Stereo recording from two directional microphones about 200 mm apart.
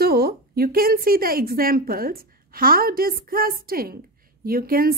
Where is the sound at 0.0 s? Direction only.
50° right (ahead or behind).